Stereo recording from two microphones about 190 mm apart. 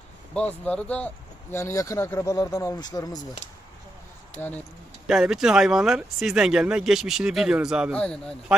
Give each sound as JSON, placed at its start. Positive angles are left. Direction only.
{"t": 0.3, "sound": "speech", "side_deg": 5}
{"t": 4.4, "sound": "speech", "side_deg": 10}
{"t": 5.0, "sound": "speech", "side_deg": -5}